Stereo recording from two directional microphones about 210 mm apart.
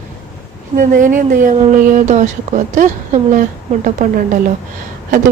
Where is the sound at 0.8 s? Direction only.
40° right (ahead or behind).